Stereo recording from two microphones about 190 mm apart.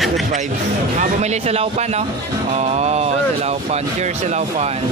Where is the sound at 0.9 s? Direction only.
35° right (ahead or behind).